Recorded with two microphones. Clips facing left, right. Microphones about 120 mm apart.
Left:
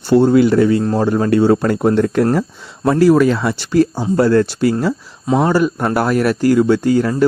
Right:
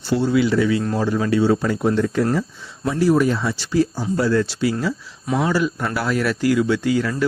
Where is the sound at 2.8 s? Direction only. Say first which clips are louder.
Left 6 dB; 80° left.